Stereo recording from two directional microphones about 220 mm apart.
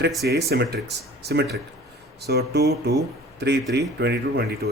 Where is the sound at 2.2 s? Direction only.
45° right (ahead or behind).